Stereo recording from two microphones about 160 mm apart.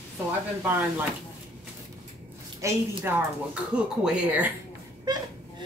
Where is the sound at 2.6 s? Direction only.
15° right (ahead or behind).